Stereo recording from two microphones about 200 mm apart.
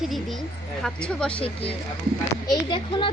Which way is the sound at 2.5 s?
25° left (ahead or behind).